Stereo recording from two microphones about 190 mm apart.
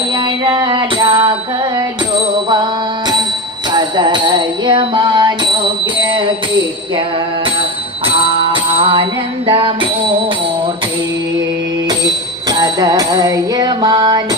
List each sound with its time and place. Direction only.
0.4 s music: 25° right (ahead or behind)
3.7 s music: 25° right (ahead or behind)
8.0 s music: 30° right (ahead or behind)
9.5 s bicycle bell: 30° right (ahead or behind)
12.5 s music: 20° right (ahead or behind)